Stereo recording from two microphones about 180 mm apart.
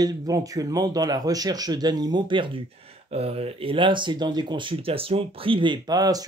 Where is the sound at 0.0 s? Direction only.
20° right (ahead or behind).